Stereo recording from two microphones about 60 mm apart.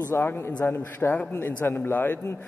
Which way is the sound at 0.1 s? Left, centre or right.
Left.